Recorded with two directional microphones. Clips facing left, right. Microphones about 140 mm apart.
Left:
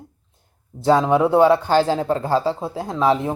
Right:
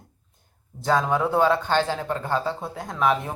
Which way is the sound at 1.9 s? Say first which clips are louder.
Left 7 dB; 35° left (ahead or behind).